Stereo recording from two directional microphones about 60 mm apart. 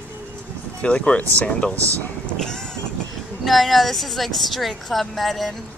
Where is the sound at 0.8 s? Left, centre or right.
Left.